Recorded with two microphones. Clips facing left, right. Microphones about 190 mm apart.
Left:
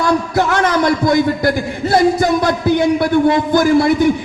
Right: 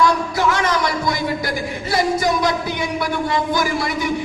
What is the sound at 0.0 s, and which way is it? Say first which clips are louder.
A man's voice: left 2 dB; 55° left (ahead or behind).